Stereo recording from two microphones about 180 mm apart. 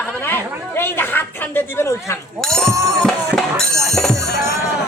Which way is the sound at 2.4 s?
5° left (ahead or behind).